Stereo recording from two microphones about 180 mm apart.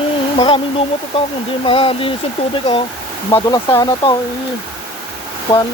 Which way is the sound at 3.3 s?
20° left (ahead or behind).